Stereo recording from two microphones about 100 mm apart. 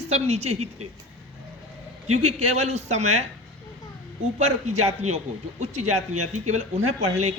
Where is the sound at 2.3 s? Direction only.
90° right.